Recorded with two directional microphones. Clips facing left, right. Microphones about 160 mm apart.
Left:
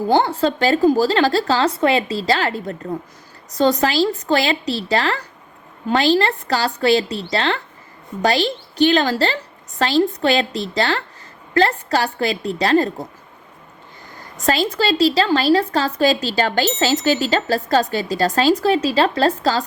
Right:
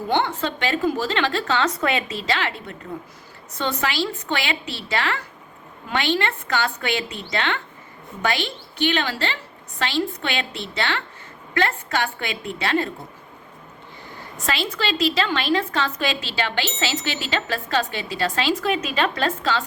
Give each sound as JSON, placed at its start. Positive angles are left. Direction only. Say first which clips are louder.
{"t": 0.1, "sound": "a woman's voice", "louder": "left 6 dB", "side_deg": 35}
{"t": 14.3, "sound": "a woman's voice", "louder": "left 7 dB", "side_deg": 40}